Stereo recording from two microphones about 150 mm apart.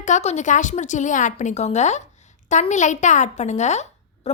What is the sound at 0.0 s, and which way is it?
A woman's voice, 50° left (ahead or behind).